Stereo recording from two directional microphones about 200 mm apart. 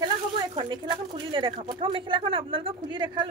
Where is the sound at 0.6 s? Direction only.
25° right (ahead or behind).